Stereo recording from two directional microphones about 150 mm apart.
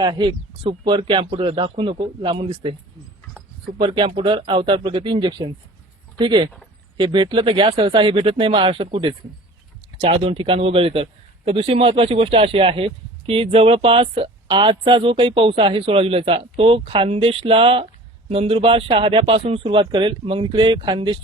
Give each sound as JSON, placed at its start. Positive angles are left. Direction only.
{"t": 0.0, "sound": "a man's voice", "side_deg": -30}
{"t": 3.8, "sound": "a man's voice", "side_deg": -35}